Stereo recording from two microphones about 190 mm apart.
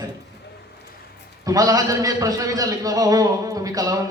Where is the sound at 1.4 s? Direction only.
20° right (ahead or behind).